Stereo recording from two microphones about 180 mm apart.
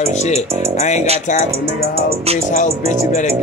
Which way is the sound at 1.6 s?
35° right (ahead or behind).